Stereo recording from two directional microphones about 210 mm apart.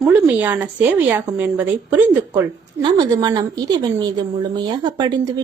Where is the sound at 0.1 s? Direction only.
10° right (ahead or behind).